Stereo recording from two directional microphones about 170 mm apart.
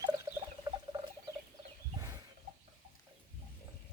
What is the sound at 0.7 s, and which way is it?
Rodents, 20° right (ahead or behind).